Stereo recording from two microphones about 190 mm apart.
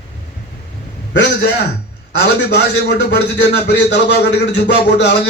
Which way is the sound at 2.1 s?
60° left (ahead or behind).